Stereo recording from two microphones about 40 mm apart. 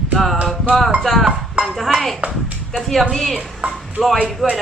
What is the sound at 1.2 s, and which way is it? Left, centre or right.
Chink, centre.